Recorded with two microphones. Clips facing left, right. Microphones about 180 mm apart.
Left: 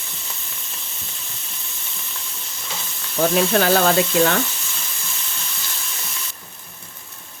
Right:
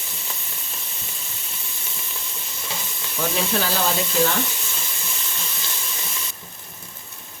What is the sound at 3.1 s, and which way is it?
Speech, 60° left (ahead or behind).